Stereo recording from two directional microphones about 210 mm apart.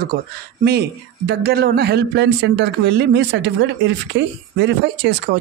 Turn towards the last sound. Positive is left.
turn(degrees=-55)  # may be behind; listen again after turning